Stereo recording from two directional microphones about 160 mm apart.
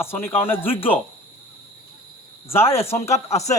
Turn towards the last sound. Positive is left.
turn(degrees=45)  # may be behind; listen again after turning